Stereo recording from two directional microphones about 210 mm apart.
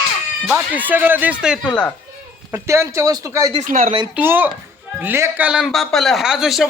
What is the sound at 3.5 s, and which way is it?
Speech, 35° right (ahead or behind).